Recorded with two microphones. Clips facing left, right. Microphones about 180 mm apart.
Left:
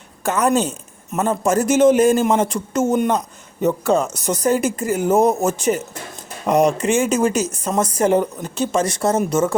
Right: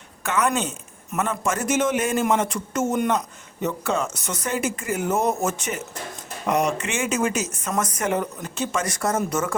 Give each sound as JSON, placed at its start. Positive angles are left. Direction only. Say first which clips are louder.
{"t": 0.2, "sound": "speech", "louder": "left 5 dB", "side_deg": 35}